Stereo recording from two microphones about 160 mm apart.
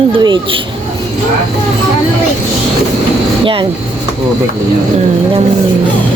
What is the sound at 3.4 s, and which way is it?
Speech, 30° right (ahead or behind).